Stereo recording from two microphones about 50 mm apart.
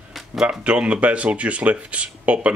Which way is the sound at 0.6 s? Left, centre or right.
Right.